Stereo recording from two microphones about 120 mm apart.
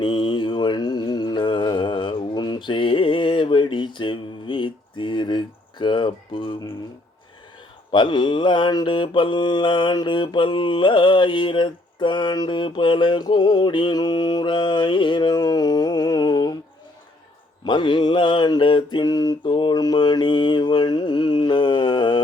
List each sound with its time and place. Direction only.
0.0 s mantra: 45° left (ahead or behind)
5.8 s a sound: 45° left (ahead or behind)
7.9 s mantra: 40° left (ahead or behind)
17.6 s mantra: 40° left (ahead or behind)